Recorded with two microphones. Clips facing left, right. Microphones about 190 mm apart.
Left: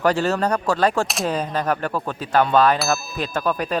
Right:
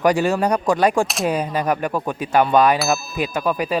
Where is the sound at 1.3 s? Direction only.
10° right (ahead or behind).